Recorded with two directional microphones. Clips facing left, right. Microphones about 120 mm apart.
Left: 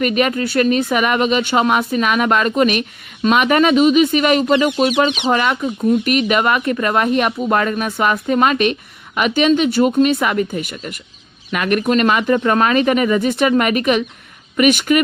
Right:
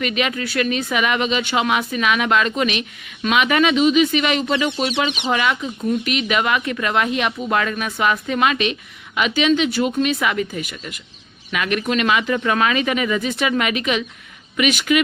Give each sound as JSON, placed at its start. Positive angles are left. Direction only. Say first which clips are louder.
{"t": 0.0, "sound": "speech", "louder": "left 6 dB", "side_deg": 45}
{"t": 11.5, "sound": "speech", "louder": "left 5 dB", "side_deg": 45}